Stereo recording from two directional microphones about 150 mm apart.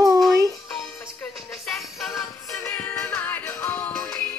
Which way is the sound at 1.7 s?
Centre (ahead or behind).